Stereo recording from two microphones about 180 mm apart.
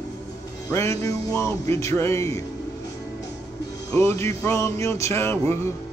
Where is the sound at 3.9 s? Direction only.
15° left (ahead or behind).